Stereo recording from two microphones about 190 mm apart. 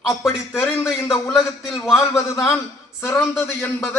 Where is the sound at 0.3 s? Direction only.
Centre (ahead or behind).